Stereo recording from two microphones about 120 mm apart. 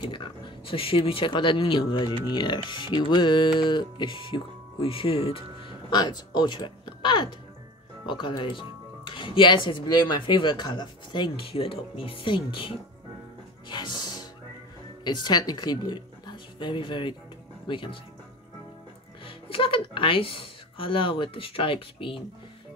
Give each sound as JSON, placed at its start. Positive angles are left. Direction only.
{"t": 0.0, "sound": "speech", "side_deg": 45}
{"t": 13.7, "sound": "music", "side_deg": 40}
{"t": 15.0, "sound": "a woman's voice", "side_deg": 35}
{"t": 19.2, "sound": "speech", "side_deg": 45}